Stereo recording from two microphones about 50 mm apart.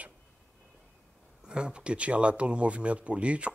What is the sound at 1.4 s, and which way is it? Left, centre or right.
Speech, centre.